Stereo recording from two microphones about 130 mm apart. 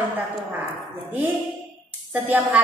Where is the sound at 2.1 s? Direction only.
10° right (ahead or behind).